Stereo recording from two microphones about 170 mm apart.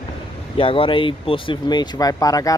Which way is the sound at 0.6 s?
30° left (ahead or behind).